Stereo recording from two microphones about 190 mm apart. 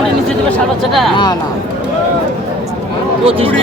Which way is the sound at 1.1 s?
25° left (ahead or behind).